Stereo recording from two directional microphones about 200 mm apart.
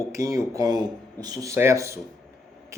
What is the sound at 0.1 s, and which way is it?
Speech, 15° right (ahead or behind).